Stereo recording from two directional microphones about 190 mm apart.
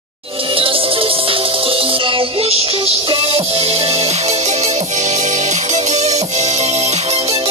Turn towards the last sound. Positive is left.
turn(degrees=-30)  # may be behind; listen again after turning